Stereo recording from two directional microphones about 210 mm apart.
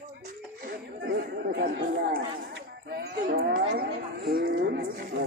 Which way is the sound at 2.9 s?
50° right (ahead or behind).